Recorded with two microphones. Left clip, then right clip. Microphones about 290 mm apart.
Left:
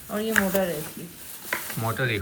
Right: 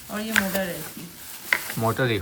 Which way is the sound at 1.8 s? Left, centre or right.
Centre.